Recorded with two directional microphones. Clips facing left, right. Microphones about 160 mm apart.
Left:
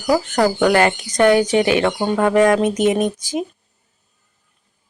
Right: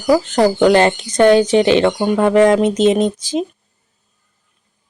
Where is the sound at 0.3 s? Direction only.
25° right (ahead or behind).